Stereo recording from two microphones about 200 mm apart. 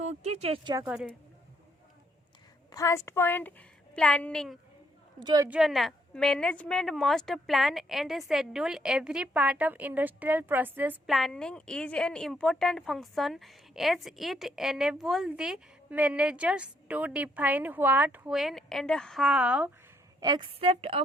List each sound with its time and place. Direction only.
0.0 s speech: 35° right (ahead or behind)
0.9 s a woman's voice: 5° right (ahead or behind)
2.7 s a woman's voice: 15° left (ahead or behind)
5.2 s a woman's voice: 20° right (ahead or behind)
5.5 s a woman's voice: centre (ahead or behind)
20.2 s a woman's voice: 20° right (ahead or behind)